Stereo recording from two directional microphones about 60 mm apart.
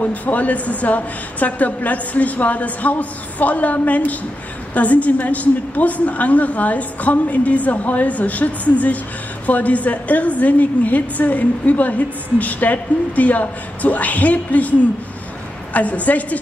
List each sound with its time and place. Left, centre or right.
0.0 s a woman's voice: left
15.7 s a woman's voice: left